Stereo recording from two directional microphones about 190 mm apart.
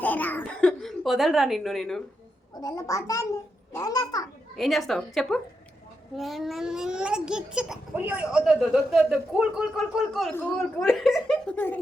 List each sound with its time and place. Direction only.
0.0 s a sound: 10° left (ahead or behind)
2.6 s a child's voice: 15° left (ahead or behind)
4.5 s a child's voice: centre (ahead or behind)
10.3 s a child's voice: 10° left (ahead or behind)